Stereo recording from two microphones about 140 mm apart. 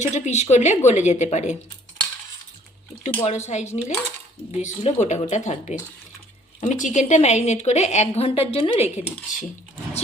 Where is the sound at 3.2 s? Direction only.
55° left (ahead or behind).